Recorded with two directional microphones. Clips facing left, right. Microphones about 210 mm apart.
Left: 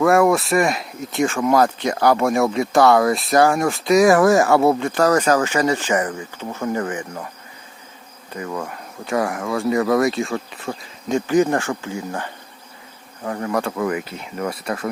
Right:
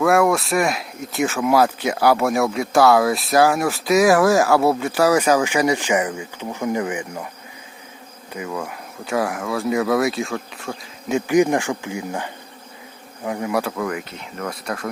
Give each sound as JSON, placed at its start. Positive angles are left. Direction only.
{"t": 0.0, "sound": "speech", "side_deg": 0}
{"t": 8.4, "sound": "speech", "side_deg": -5}
{"t": 11.3, "sound": "speech", "side_deg": -15}